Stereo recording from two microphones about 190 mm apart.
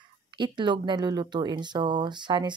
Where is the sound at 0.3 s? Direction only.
25° right (ahead or behind).